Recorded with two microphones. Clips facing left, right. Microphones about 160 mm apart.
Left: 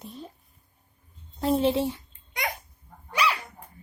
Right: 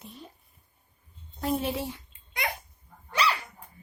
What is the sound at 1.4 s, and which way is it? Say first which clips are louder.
Speech: left 6 dB; 30° left (ahead or behind).